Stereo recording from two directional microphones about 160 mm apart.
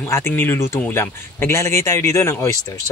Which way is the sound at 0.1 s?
15° left (ahead or behind).